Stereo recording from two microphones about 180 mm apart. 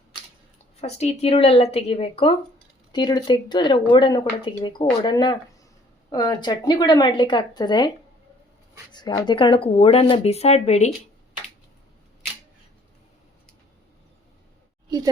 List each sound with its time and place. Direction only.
0.8 s a woman's voice: 35° left (ahead or behind)
8.9 s speech: 25° left (ahead or behind); by 10.9 s 40° left (ahead or behind)
14.8 s a sound: 20° right (ahead or behind)